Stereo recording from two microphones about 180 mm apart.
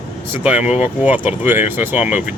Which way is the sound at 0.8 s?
10° right (ahead or behind).